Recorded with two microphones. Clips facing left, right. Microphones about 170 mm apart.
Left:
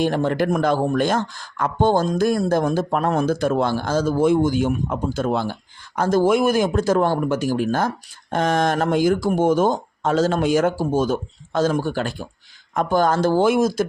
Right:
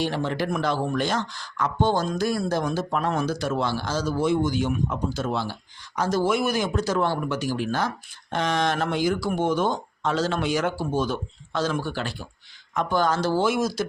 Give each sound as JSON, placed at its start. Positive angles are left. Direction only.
{"t": 0.0, "sound": "speech", "side_deg": 50}